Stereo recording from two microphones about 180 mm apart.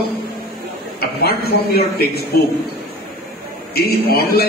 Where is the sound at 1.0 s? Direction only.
60° left (ahead or behind).